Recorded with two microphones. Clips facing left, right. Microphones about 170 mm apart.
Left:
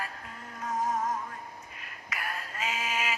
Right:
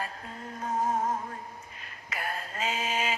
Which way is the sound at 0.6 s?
30° right (ahead or behind).